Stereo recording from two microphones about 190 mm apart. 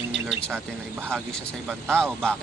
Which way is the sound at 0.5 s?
10° right (ahead or behind).